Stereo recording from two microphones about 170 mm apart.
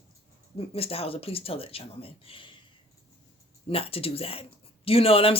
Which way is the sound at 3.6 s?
35° left (ahead or behind).